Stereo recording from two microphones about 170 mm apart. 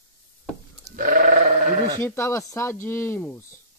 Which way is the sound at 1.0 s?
55° right (ahead or behind).